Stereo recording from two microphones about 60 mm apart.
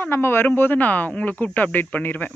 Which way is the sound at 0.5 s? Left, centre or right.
Left.